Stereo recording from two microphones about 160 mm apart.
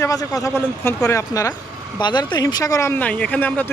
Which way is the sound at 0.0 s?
20° left (ahead or behind).